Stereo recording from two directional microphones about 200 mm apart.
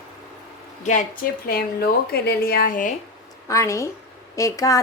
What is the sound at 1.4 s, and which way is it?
Speech, 50° left (ahead or behind).